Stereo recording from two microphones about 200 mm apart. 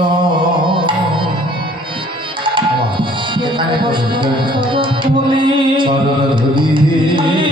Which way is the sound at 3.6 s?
25° right (ahead or behind).